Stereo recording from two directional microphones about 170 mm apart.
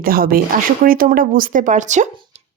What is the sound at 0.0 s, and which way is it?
Speech, 60° right (ahead or behind).